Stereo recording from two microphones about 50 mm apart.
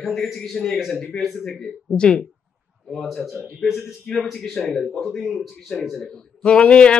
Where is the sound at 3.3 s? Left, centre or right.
Centre.